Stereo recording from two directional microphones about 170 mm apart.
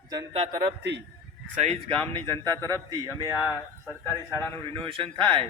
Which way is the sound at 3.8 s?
5° left (ahead or behind).